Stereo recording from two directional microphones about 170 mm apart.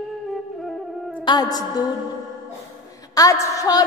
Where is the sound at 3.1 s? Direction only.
20° left (ahead or behind).